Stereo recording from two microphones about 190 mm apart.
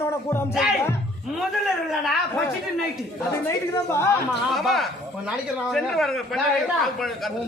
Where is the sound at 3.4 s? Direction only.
15° left (ahead or behind).